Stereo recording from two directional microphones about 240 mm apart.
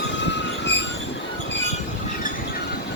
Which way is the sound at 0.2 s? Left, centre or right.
Left.